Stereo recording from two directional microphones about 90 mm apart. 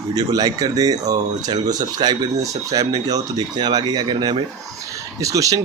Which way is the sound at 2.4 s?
40° right (ahead or behind).